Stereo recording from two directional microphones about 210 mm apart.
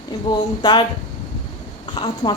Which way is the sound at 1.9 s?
20° left (ahead or behind).